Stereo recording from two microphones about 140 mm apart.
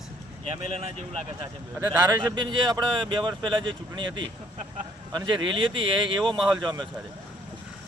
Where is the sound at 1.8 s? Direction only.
25° right (ahead or behind).